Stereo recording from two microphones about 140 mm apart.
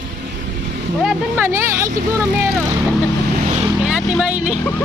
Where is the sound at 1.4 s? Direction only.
20° right (ahead or behind).